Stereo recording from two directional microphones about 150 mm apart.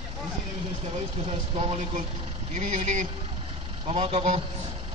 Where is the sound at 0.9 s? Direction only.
35° right (ahead or behind).